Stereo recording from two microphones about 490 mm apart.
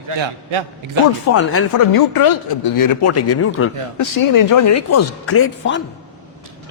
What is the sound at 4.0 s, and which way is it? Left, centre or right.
Speech, left.